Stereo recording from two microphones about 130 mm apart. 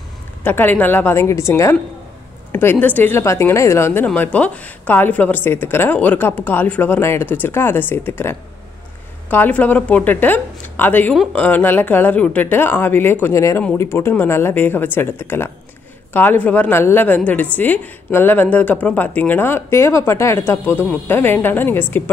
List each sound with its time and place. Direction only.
0.4 s a woman's voice: 15° left (ahead or behind)